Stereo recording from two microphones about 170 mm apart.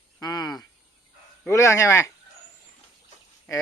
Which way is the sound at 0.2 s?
20° left (ahead or behind).